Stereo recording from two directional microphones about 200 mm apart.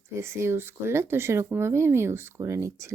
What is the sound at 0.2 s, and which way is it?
Speech, 15° right (ahead or behind).